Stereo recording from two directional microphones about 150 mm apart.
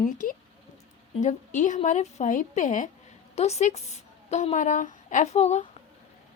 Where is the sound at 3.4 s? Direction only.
45° left (ahead or behind).